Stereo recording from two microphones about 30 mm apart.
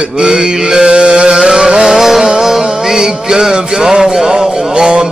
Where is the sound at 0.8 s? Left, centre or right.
Right.